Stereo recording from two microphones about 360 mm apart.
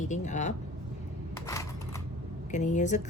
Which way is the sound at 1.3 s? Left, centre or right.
Centre.